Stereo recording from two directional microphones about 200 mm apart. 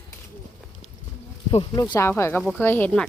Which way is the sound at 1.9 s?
10° left (ahead or behind).